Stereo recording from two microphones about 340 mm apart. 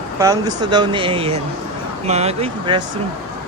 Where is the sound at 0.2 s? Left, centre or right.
Centre.